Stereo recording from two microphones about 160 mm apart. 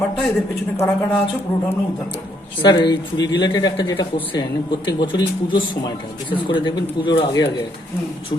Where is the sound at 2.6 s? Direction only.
25° left (ahead or behind).